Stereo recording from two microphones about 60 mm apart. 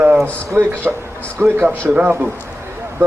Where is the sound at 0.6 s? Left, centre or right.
Right.